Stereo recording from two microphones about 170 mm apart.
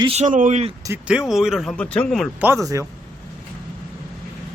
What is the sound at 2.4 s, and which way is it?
Speech, 15° right (ahead or behind).